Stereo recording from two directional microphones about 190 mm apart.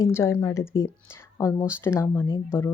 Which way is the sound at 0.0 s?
15° left (ahead or behind).